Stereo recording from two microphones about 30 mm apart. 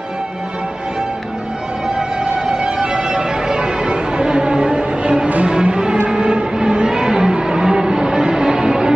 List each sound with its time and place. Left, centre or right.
2.0 s music: right